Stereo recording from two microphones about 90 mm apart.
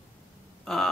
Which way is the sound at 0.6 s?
5° left (ahead or behind).